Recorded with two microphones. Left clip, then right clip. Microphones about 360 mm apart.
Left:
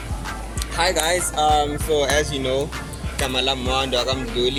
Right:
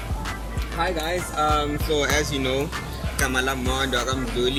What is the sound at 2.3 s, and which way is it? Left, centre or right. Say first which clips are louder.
Speech: left 2 dB; left.